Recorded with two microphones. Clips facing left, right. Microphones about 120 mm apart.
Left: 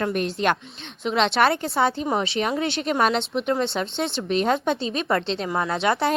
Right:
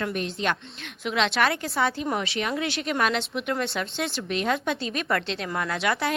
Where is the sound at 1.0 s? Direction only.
30° left (ahead or behind).